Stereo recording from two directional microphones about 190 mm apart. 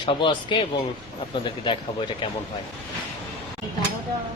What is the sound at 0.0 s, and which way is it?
Speech, 25° left (ahead or behind).